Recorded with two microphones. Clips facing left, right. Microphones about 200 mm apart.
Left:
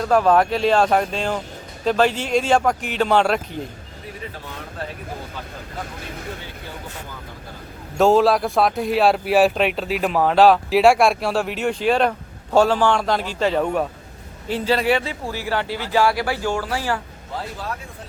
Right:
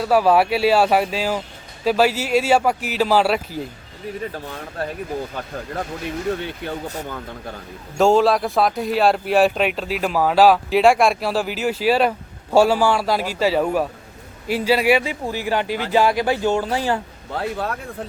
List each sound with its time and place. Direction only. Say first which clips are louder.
0.0 s speech: even; 5° right (ahead or behind)
7.9 s speech: even; centre (ahead or behind); by 17.0 s 20° right (ahead or behind)
17.3 s speech: right 5 dB; 65° right (ahead or behind)